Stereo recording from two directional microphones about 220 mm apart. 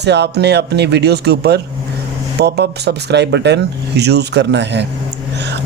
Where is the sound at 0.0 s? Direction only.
50° right (ahead or behind).